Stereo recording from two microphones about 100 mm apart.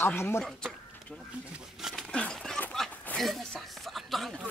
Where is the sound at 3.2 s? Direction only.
Centre (ahead or behind).